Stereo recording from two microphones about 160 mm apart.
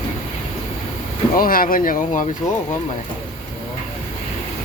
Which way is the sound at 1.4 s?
60° left (ahead or behind).